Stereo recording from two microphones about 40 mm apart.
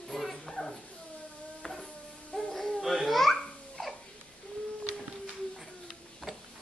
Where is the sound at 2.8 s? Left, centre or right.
Centre.